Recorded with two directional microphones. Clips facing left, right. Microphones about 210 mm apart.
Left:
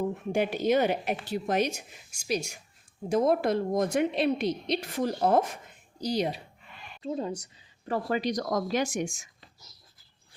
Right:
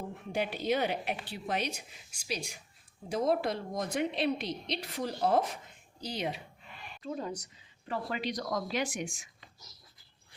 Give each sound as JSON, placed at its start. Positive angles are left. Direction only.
{"t": 0.3, "sound": "a woman's voice", "side_deg": 50}
{"t": 6.0, "sound": "speech", "side_deg": 40}
{"t": 7.0, "sound": "a woman's voice", "side_deg": 25}
{"t": 7.9, "sound": "a woman's voice", "side_deg": 40}